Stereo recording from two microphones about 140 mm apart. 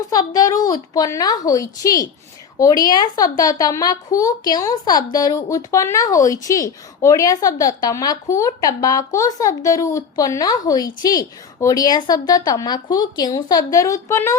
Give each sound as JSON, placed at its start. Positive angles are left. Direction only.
{"t": 0.3, "sound": "a woman's voice", "side_deg": 25}